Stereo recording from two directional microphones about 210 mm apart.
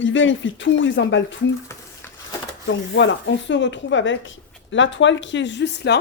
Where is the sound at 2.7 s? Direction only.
60° left (ahead or behind).